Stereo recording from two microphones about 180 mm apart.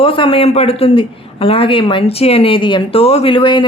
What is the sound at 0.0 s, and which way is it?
Speech, 30° left (ahead or behind).